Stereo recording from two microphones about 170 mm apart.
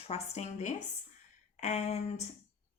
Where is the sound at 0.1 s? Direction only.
40° left (ahead or behind).